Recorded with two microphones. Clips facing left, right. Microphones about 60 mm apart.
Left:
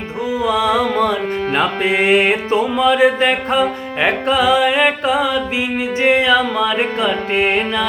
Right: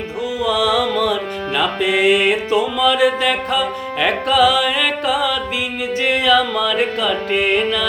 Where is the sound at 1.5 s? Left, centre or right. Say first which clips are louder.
Even; left.